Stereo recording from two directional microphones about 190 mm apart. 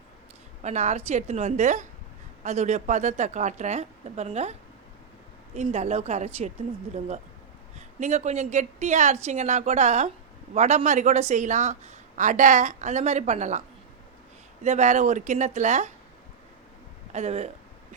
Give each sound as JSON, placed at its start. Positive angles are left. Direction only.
{"t": 0.6, "sound": "speech", "side_deg": -35}
{"t": 5.5, "sound": "speech", "side_deg": -35}
{"t": 7.8, "sound": "speech", "side_deg": -40}
{"t": 17.1, "sound": "speech", "side_deg": -35}